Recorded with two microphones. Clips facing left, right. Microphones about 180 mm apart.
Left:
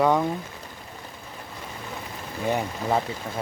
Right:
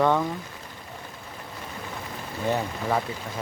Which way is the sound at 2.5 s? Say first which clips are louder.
Left 1 dB; 15° left (ahead or behind).